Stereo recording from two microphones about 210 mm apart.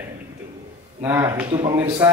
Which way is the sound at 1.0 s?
10° right (ahead or behind).